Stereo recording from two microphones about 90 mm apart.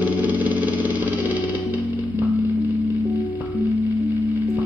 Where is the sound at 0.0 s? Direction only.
15° right (ahead or behind).